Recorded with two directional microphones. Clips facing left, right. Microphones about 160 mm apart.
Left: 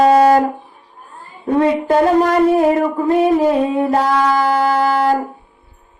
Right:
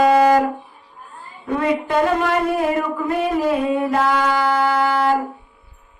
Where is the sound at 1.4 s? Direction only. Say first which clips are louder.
Left 6 dB; 40° left (ahead or behind).